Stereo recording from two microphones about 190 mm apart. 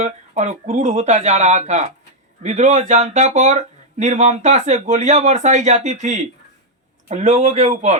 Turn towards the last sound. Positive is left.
turn(degrees=-35)  # may be behind; listen again after turning